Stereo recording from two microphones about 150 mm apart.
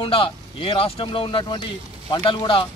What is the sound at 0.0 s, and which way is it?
Speech, 35° left (ahead or behind).